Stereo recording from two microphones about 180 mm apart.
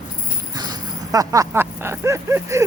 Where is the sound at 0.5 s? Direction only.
20° right (ahead or behind).